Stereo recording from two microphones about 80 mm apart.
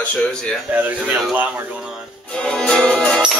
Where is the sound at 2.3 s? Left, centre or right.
Centre.